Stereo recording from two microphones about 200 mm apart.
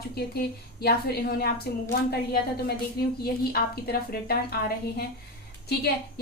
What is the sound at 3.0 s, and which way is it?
Speech, 50° left (ahead or behind).